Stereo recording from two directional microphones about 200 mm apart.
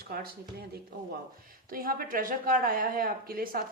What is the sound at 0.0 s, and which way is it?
Speech, 50° right (ahead or behind).